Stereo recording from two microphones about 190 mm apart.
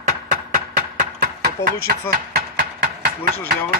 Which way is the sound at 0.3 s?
45° right (ahead or behind).